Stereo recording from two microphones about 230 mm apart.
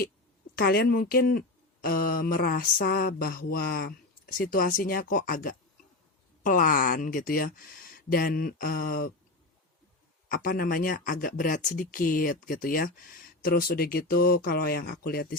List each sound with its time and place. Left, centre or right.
0.5 s speech: left
10.2 s speech: left